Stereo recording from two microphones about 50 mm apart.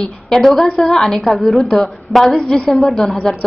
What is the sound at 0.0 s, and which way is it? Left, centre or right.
A woman's voice, centre.